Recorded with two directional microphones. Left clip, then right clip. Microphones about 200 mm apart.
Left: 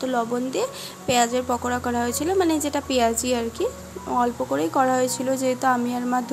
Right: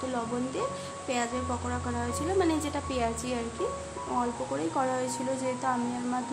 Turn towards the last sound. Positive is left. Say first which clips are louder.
# left 8 dB
turn(degrees=35)  # may be behind; listen again after turning